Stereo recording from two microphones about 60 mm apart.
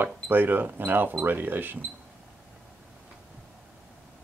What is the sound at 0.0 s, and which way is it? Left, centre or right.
Speech, right.